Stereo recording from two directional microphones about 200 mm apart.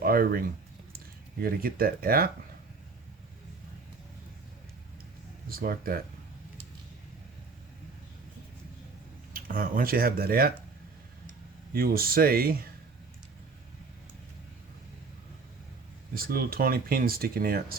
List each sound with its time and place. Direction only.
0.0 s speech: 45° right (ahead or behind)
5.5 s speech: 45° right (ahead or behind)
9.3 s speech: 45° right (ahead or behind)
11.7 s speech: 50° right (ahead or behind)
16.1 s speech: 50° right (ahead or behind)